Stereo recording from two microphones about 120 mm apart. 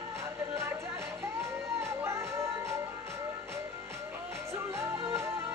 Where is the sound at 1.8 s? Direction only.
25° right (ahead or behind).